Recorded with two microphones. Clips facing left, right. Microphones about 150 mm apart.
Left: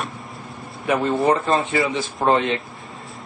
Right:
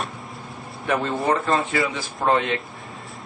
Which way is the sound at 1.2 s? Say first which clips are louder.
Left 3 dB; 25° left (ahead or behind).